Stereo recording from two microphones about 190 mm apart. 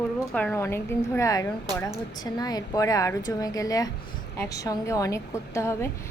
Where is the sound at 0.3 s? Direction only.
10° left (ahead or behind).